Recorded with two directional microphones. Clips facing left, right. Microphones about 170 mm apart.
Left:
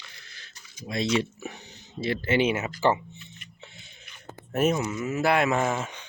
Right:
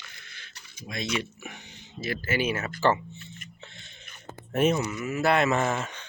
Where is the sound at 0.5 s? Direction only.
60° right (ahead or behind).